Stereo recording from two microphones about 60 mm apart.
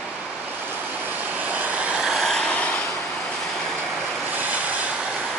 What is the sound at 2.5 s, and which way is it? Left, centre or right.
Vehicle, left.